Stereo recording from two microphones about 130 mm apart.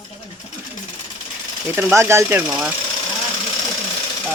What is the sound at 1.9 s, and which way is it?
Speech, 20° right (ahead or behind).